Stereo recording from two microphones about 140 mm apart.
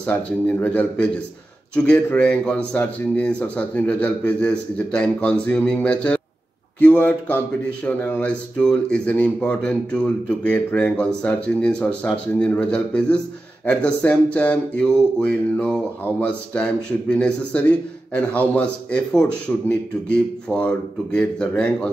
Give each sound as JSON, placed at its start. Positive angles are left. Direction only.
{"t": 0.0, "sound": "speech", "side_deg": 10}